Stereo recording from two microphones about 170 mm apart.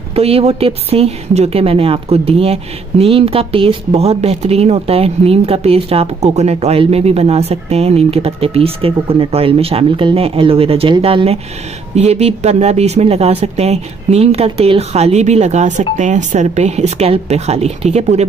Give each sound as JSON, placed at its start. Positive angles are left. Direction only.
{"t": 0.1, "sound": "speech", "side_deg": -35}